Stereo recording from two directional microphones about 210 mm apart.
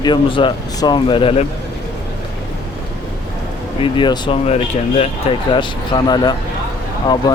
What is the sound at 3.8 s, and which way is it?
Speech, 25° left (ahead or behind).